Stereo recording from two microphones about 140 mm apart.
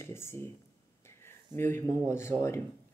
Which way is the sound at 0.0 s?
20° left (ahead or behind).